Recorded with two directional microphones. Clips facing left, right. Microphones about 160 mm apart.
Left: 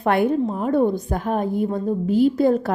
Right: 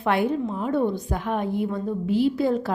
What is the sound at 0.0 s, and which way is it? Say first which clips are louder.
A woman's voice: left 4 dB; 50° left (ahead or behind).